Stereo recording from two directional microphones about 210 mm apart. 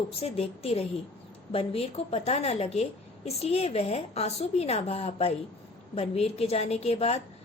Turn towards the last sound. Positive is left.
turn(degrees=30)  # may be behind; listen again after turning